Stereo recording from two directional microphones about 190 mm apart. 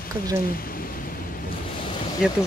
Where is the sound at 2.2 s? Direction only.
5° right (ahead or behind).